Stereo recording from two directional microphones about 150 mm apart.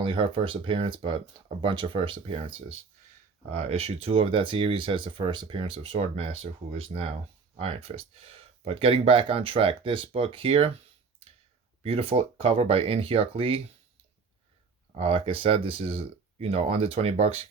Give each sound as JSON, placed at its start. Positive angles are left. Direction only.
{"t": 0.0, "sound": "speech", "side_deg": -35}
{"t": 11.8, "sound": "speech", "side_deg": -40}
{"t": 14.9, "sound": "speech", "side_deg": -40}